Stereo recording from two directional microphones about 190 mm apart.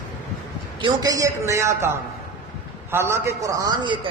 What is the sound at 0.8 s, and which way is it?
A man's voice, 20° right (ahead or behind).